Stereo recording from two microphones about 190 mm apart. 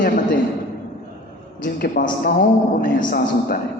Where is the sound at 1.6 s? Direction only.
50° left (ahead or behind).